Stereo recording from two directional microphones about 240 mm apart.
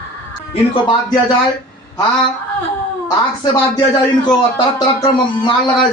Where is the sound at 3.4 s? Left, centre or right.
Centre.